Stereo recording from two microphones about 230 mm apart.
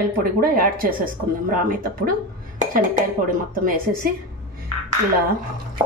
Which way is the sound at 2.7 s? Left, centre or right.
Right.